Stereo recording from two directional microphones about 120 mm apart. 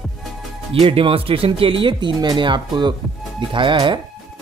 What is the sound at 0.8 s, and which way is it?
Speech, 55° right (ahead or behind).